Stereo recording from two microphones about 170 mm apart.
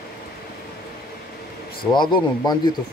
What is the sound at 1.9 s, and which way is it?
Speech, 25° left (ahead or behind).